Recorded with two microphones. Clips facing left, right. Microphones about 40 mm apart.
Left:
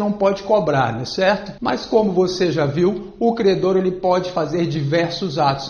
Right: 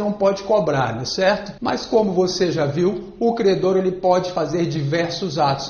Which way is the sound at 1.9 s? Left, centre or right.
Left.